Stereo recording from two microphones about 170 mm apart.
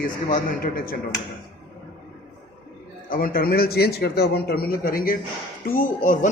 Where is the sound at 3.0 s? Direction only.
55° left (ahead or behind).